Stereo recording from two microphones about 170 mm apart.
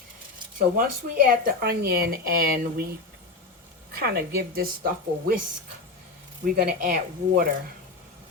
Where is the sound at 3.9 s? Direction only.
65° right (ahead or behind).